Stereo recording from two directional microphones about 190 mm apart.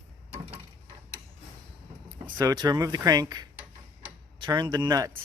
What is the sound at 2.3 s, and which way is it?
Speech, 20° right (ahead or behind).